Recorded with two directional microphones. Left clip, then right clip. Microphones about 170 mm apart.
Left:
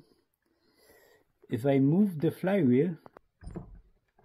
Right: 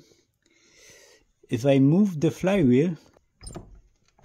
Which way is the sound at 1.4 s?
35° right (ahead or behind).